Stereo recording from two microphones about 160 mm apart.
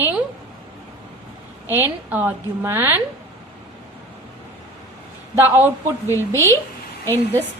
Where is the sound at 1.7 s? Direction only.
10° right (ahead or behind).